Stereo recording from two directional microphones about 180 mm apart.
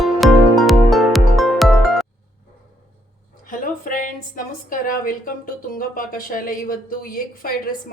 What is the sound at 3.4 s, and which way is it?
A woman's voice, 50° left (ahead or behind).